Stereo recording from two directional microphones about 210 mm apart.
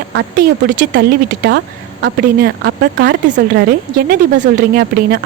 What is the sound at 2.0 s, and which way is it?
Speech, 50° right (ahead or behind).